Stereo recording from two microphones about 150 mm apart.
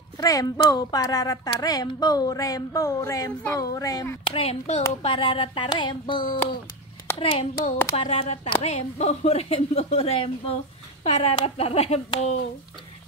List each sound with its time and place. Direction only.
0.2 s a woman's voice: 25° left (ahead or behind)
4.3 s a sound: 40° left (ahead or behind)
7.9 s speech: 40° left (ahead or behind)